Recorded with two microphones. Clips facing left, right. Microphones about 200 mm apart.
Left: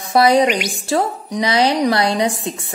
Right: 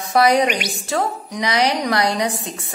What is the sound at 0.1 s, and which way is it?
A woman's voice, 30° left (ahead or behind).